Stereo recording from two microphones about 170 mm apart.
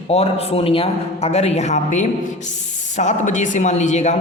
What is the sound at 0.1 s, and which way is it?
Speech, 35° left (ahead or behind).